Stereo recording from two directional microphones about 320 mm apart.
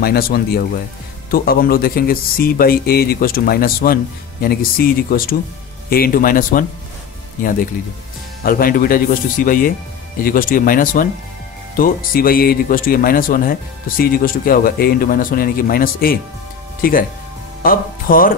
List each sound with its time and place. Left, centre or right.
0.0 s speech: left
8.5 s speech: left